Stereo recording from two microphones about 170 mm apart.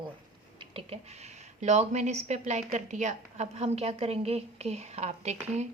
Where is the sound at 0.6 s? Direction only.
35° right (ahead or behind).